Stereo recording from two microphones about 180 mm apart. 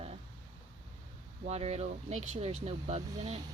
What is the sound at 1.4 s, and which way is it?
Speech, 35° right (ahead or behind).